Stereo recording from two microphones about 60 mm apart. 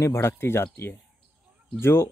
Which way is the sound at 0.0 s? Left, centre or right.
Left.